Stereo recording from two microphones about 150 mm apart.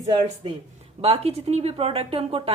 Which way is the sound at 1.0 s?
40° right (ahead or behind).